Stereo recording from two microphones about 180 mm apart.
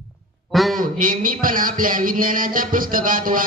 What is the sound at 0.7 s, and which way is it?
Music, 50° right (ahead or behind).